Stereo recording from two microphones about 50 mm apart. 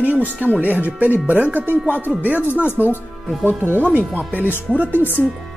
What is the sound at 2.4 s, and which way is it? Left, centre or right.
Speech, left.